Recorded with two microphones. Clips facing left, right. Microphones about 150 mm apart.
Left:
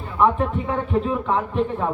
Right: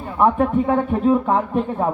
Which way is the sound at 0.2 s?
50° right (ahead or behind).